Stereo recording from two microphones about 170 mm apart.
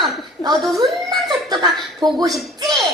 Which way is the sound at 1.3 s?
25° right (ahead or behind).